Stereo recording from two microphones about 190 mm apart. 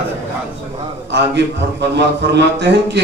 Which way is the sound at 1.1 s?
65° right (ahead or behind).